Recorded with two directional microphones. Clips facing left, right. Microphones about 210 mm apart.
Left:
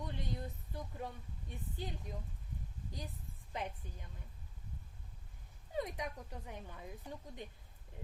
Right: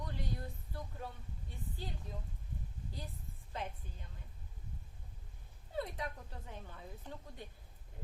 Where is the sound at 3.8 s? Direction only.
15° left (ahead or behind).